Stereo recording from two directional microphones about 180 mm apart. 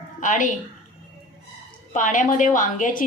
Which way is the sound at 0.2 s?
45° left (ahead or behind).